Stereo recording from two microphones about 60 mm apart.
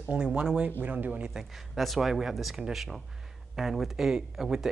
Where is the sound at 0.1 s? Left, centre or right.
Centre.